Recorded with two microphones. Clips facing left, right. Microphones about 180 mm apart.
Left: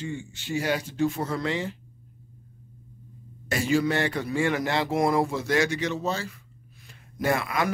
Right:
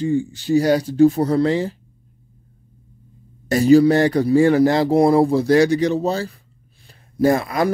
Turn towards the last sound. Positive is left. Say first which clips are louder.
# right 9 dB
turn(degrees=-35)  # may be behind; listen again after turning